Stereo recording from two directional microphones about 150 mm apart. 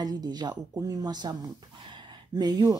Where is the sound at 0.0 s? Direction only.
25° right (ahead or behind).